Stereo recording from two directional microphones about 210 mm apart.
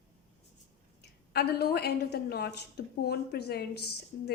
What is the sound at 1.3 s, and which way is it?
A woman's voice, 50° left (ahead or behind).